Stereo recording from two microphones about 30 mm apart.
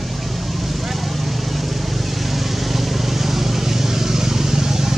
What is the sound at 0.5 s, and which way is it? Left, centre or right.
Vehicle, centre.